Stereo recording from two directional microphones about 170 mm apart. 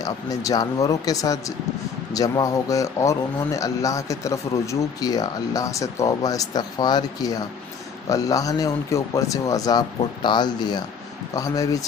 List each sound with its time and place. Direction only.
0.0 s speech: 20° left (ahead or behind)